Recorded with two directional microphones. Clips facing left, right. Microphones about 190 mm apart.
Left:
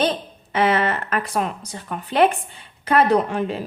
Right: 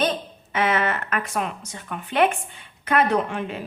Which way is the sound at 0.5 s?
35° left (ahead or behind).